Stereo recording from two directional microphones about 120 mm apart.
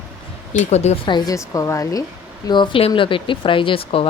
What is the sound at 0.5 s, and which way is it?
Speech, 70° left (ahead or behind).